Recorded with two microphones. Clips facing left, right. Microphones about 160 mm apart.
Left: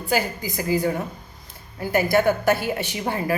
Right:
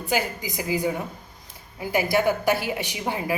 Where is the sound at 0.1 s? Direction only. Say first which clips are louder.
Left 2 dB; 15° right (ahead or behind).